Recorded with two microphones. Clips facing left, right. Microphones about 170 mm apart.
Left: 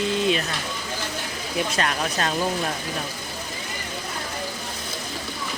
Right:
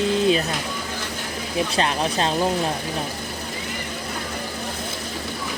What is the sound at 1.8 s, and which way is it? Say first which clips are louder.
Speech: right 3 dB; 30° right (ahead or behind).